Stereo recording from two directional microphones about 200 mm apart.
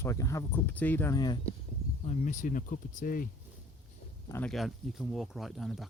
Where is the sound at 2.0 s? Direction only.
35° left (ahead or behind).